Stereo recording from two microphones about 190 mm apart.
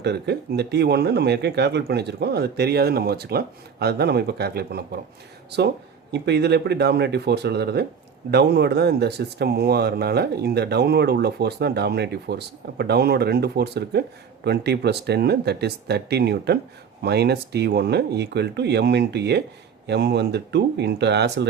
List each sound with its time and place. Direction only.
0.0 s speech: 60° right (ahead or behind)